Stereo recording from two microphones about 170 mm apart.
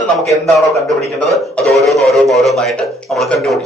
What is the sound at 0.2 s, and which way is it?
Speech, centre (ahead or behind).